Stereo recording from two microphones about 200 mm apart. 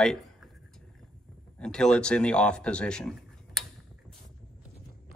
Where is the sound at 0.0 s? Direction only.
Centre (ahead or behind).